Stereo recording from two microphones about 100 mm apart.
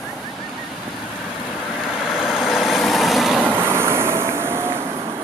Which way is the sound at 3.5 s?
25° right (ahead or behind).